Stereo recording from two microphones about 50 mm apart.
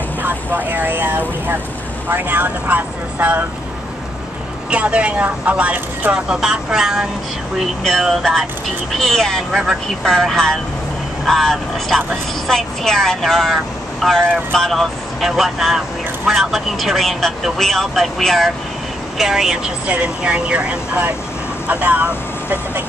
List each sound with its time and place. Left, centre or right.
0.2 s speech: right
4.6 s speech: right
6.1 s speech: centre
8.0 s speech: centre
9.5 s speech: centre
10.0 s speech: centre
19.9 s speech: right
21.6 s speech: right